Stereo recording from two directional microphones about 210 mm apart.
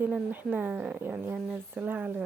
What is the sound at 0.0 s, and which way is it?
Speech, 10° right (ahead or behind).